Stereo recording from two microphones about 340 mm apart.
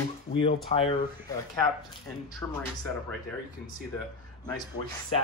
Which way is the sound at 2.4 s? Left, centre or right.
Centre.